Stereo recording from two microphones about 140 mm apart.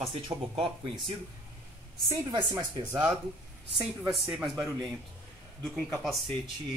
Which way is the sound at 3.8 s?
5° right (ahead or behind).